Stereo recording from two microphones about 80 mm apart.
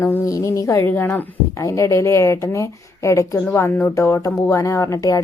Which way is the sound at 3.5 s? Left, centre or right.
Left.